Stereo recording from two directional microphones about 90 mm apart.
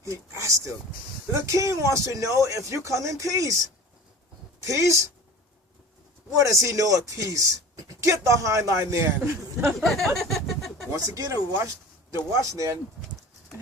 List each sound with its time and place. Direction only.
0.0 s speech: 35° right (ahead or behind)
4.6 s speech: 35° right (ahead or behind)
6.3 s speech: 35° right (ahead or behind)
9.8 s speech: centre (ahead or behind)
10.9 s speech: 40° right (ahead or behind)